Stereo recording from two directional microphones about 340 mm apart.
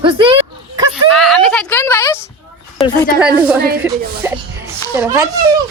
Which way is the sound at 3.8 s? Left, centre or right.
Centre.